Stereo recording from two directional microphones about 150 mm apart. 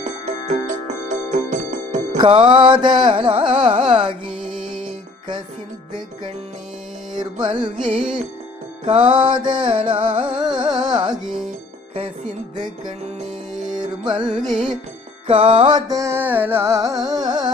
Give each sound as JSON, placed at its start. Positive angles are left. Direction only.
{"t": 0.0, "sound": "music", "side_deg": -50}
{"t": 2.2, "sound": "carnatic music", "side_deg": -35}
{"t": 4.3, "sound": "music", "side_deg": -5}
{"t": 7.2, "sound": "carnatic music", "side_deg": -30}
{"t": 7.8, "sound": "music", "side_deg": -5}
{"t": 8.9, "sound": "carnatic music", "side_deg": -35}
{"t": 10.3, "sound": "music", "side_deg": -30}
{"t": 11.2, "sound": "music", "side_deg": -5}
{"t": 12.5, "sound": "carnatic music", "side_deg": -30}
{"t": 13.5, "sound": "music", "side_deg": 0}
{"t": 15.3, "sound": "music", "side_deg": -35}